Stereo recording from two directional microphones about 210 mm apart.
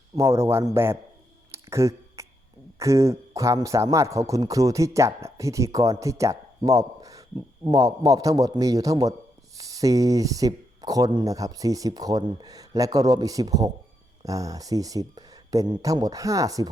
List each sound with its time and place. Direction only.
0.2 s speech: 10° right (ahead or behind)
1.5 s a sound: 15° right (ahead or behind)
2.7 s speech: 15° right (ahead or behind)